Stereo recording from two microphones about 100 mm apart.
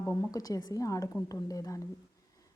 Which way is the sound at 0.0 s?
35° left (ahead or behind).